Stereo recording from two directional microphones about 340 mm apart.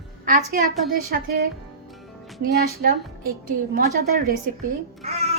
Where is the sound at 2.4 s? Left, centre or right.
Right.